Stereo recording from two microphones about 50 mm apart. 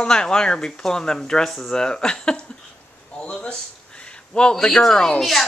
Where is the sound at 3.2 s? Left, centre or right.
Centre.